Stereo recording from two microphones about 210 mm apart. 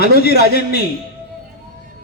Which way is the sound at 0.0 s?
50° left (ahead or behind).